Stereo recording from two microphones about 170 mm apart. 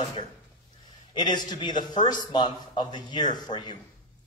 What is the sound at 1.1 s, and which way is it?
A man's voice, 25° left (ahead or behind).